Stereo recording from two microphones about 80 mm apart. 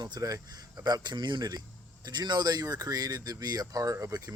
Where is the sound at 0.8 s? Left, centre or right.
Right.